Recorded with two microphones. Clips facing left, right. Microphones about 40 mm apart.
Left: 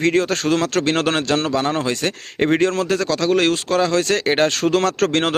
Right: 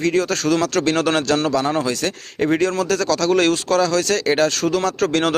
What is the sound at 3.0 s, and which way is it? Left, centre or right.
Speech, centre.